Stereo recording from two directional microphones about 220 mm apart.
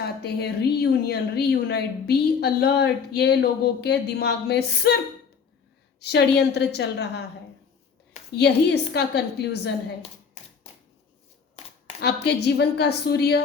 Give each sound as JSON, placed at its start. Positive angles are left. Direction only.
{"t": 0.2, "sound": "a woman's voice", "side_deg": 45}
{"t": 6.0, "sound": "a woman's voice", "side_deg": 50}
{"t": 8.4, "sound": "a woman's voice", "side_deg": 50}
{"t": 11.9, "sound": "a woman's voice", "side_deg": 50}